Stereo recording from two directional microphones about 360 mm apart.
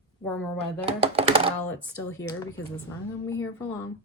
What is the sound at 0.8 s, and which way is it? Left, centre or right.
Speech, centre.